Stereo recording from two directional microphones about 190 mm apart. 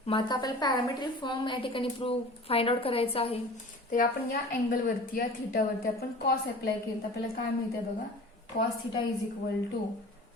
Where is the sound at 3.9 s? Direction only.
50° left (ahead or behind).